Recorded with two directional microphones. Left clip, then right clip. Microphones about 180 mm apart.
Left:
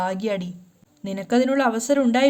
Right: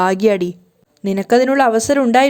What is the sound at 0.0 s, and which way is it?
A woman's voice, 45° right (ahead or behind).